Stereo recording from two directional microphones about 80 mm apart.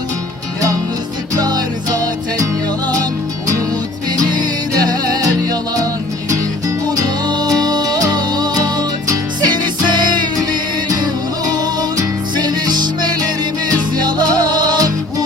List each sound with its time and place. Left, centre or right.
1.3 s music: right
4.3 s music: right
7.3 s music: right
11.5 s music: right